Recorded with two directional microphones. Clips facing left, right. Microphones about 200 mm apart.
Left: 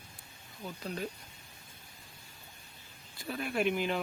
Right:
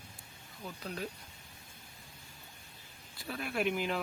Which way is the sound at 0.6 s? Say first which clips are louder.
Left 2 dB; centre (ahead or behind).